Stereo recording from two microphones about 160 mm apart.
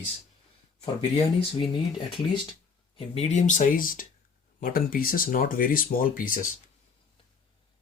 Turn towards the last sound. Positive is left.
turn(degrees=60)  # may be behind; listen again after turning